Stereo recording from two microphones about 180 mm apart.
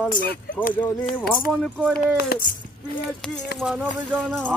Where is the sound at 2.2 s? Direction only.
60° left (ahead or behind).